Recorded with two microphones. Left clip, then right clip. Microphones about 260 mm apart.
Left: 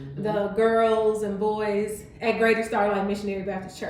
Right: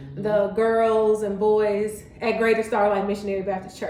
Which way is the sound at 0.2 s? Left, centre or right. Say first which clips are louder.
Right 2 dB; centre.